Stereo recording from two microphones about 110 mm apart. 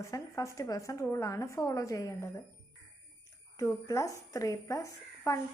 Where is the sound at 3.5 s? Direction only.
25° left (ahead or behind).